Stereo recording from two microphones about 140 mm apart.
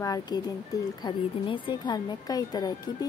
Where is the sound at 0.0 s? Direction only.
25° left (ahead or behind).